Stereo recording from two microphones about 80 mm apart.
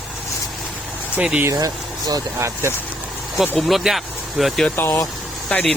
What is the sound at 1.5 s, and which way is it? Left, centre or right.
Speech, right.